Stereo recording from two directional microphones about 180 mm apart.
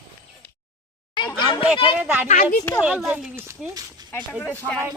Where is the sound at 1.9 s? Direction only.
10° right (ahead or behind).